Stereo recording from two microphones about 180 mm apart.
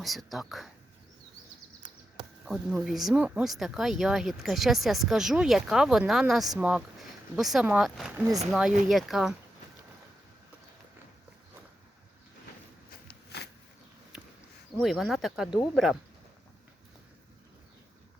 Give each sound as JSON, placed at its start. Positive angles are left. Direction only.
{"t": 0.0, "sound": "speech", "side_deg": 0}
{"t": 2.4, "sound": "speech", "side_deg": 0}
{"t": 8.1, "sound": "speech", "side_deg": -15}
{"t": 8.5, "sound": "speech", "side_deg": 0}
{"t": 13.1, "sound": "a sound", "side_deg": 65}
{"t": 14.8, "sound": "speech", "side_deg": 0}